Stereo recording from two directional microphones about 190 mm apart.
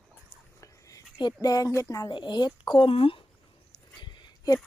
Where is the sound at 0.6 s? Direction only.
15° left (ahead or behind).